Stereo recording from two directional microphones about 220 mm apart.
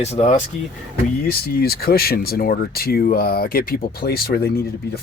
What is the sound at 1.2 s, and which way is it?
Speech, 45° left (ahead or behind).